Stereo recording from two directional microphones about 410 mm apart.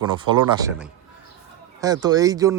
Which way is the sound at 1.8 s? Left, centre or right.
Centre.